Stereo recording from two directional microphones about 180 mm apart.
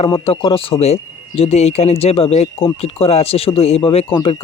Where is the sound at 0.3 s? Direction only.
30° left (ahead or behind).